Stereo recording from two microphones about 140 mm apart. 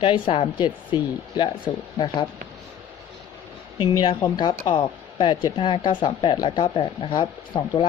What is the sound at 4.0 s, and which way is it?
Speech, 30° left (ahead or behind).